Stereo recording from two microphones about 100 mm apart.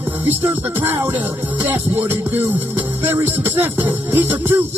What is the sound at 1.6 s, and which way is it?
Music, 20° right (ahead or behind).